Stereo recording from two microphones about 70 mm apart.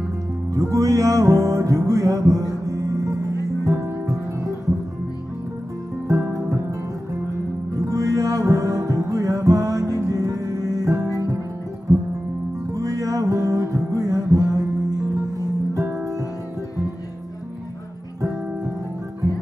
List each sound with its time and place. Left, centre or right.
0.5 s music: right
6.5 s music: right
12.7 s music: right